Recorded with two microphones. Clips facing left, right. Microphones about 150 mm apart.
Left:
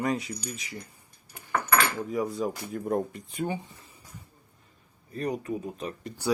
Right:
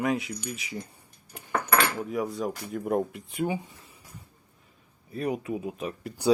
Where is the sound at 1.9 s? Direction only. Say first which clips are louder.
Left 1 dB; 5° right (ahead or behind).